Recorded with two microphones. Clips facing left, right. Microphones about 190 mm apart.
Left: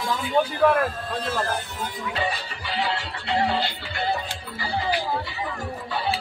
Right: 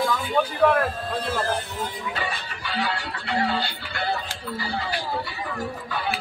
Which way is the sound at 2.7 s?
25° left (ahead or behind).